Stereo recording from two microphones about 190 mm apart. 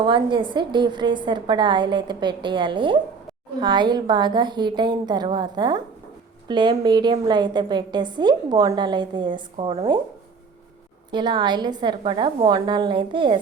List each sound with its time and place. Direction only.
0.0 s a woman's voice: 25° right (ahead or behind)
11.1 s a woman's voice: 25° right (ahead or behind)